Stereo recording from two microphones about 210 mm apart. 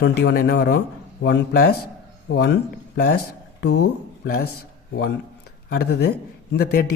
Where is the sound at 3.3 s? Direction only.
90° left.